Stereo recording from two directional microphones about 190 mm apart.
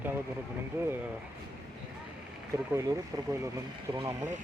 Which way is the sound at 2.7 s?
15° right (ahead or behind).